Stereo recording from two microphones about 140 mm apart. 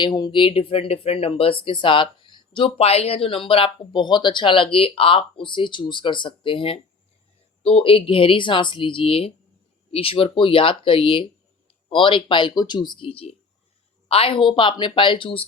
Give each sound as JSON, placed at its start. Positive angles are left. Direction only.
{"t": 0.0, "sound": "speech", "side_deg": 35}